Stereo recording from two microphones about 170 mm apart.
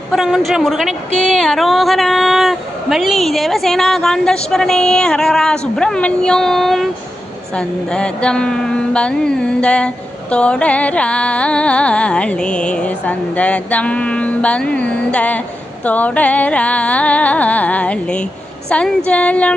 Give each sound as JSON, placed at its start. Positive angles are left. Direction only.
{"t": 0.1, "sound": "a woman's voice", "side_deg": 0}
{"t": 7.5, "sound": "mantra", "side_deg": 5}